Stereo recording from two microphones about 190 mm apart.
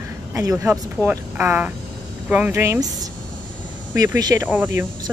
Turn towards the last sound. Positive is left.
turn(degrees=-10)  # may be behind; listen again after turning